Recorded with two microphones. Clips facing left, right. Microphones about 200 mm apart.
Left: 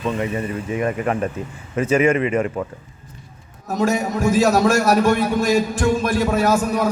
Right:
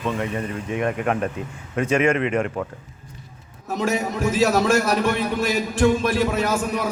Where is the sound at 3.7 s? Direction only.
45° left (ahead or behind).